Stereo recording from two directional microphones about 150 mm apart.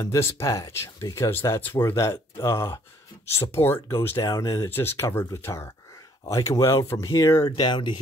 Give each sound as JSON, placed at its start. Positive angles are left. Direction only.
{"t": 0.0, "sound": "speech", "side_deg": 20}